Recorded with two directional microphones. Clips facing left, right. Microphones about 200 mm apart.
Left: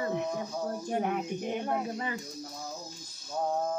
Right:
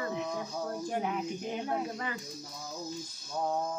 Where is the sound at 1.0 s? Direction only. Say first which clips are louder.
Left 2 dB; 55° left (ahead or behind).